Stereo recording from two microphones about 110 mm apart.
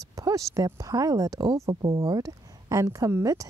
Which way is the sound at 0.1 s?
30° right (ahead or behind).